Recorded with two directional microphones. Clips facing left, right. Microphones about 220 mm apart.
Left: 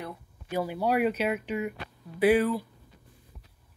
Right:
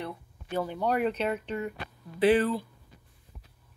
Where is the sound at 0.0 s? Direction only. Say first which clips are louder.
Right 2 dB; 10° left (ahead or behind).